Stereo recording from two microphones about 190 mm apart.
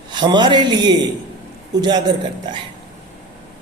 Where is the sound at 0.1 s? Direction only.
25° right (ahead or behind).